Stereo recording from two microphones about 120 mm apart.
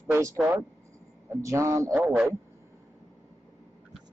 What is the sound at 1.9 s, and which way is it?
Speech, 15° right (ahead or behind).